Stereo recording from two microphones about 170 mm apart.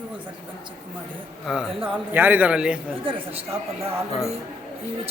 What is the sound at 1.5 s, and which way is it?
A man's voice, 5° right (ahead or behind).